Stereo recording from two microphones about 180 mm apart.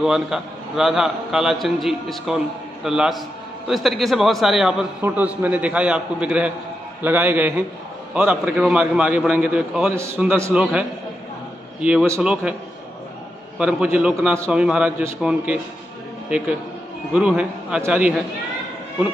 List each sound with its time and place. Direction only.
0.0 s a man's voice: 5° right (ahead or behind)
13.6 s a man's voice: 10° right (ahead or behind)